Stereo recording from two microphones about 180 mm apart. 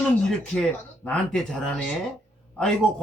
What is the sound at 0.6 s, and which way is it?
A man's voice, 5° left (ahead or behind).